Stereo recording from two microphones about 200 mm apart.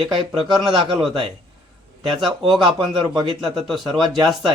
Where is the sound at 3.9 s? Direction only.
25° right (ahead or behind).